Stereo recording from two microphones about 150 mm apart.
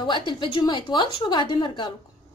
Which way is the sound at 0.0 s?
30° left (ahead or behind).